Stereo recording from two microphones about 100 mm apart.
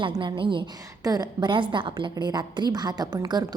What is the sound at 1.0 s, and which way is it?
A woman's voice, 40° right (ahead or behind).